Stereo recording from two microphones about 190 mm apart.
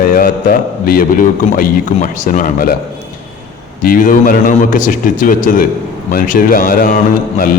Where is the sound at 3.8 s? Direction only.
45° left (ahead or behind).